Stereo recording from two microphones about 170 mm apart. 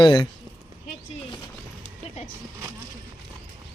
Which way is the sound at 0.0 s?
25° left (ahead or behind).